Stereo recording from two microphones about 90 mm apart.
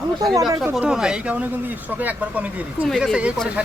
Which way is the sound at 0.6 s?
10° right (ahead or behind).